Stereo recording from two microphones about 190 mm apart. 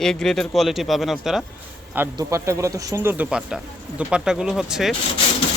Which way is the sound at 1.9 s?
15° right (ahead or behind).